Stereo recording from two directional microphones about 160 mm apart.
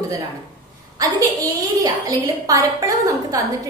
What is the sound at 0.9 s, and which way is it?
A woman's voice, 20° right (ahead or behind).